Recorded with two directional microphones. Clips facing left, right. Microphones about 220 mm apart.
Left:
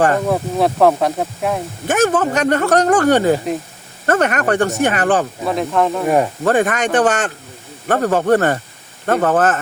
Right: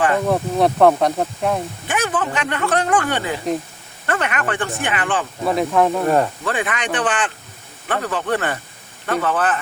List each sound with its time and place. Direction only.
0.3 s speech: centre (ahead or behind)
1.9 s speech: 45° left (ahead or behind)
5.4 s speech: centre (ahead or behind)
6.1 s speech: 15° left (ahead or behind)
6.4 s speech: 45° left (ahead or behind)